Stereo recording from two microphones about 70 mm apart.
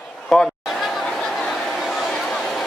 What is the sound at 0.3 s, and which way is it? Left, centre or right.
Speech, centre.